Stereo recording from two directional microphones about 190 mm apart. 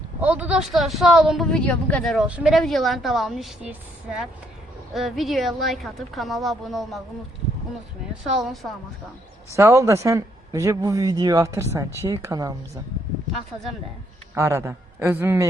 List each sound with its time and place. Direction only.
0.2 s a woman's voice: 10° right (ahead or behind)
4.9 s a woman's voice: centre (ahead or behind)
8.4 s a woman's voice: centre (ahead or behind)
9.6 s speech: 15° right (ahead or behind)
14.3 s speech: 15° right (ahead or behind)